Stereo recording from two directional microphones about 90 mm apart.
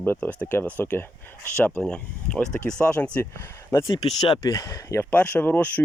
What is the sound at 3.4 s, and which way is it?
Speech, 30° left (ahead or behind).